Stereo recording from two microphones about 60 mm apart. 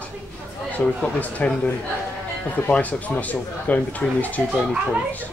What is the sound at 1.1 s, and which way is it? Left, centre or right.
Speech, left.